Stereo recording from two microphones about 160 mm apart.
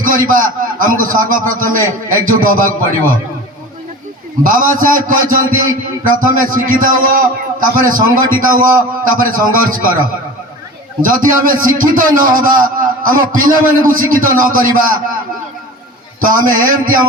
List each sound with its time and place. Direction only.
0.0 s a man's voice: 60° right (ahead or behind)
4.4 s a man's voice: 55° right (ahead or behind)
11.0 s a man's voice: 60° right (ahead or behind)
16.2 s a man's voice: 60° right (ahead or behind)